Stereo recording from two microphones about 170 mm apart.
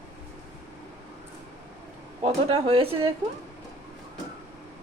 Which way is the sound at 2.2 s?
35° right (ahead or behind).